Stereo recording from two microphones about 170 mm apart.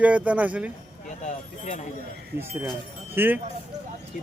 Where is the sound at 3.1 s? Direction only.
10° right (ahead or behind).